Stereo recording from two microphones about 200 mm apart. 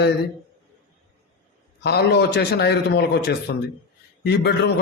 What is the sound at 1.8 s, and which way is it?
A man's voice, 55° left (ahead or behind).